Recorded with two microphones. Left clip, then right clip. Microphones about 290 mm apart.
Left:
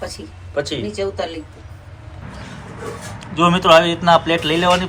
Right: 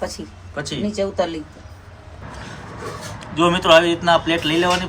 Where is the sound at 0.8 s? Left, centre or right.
Right.